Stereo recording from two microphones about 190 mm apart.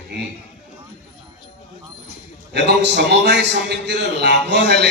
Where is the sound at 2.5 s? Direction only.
65° right (ahead or behind).